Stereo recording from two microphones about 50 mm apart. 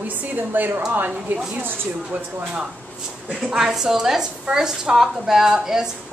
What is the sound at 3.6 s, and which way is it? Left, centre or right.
A woman's voice, centre.